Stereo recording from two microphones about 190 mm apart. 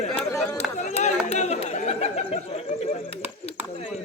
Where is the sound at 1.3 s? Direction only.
35° left (ahead or behind).